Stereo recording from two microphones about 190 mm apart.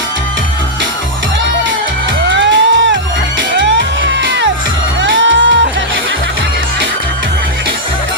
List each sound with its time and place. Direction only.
2.3 s music: 70° right (ahead or behind)